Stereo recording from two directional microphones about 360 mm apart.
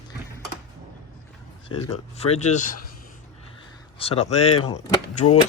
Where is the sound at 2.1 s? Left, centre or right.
Centre.